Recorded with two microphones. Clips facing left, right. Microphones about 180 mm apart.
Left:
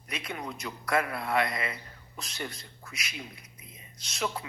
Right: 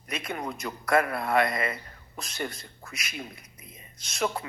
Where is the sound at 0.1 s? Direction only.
50° right (ahead or behind).